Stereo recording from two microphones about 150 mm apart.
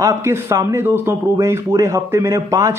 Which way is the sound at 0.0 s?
20° right (ahead or behind).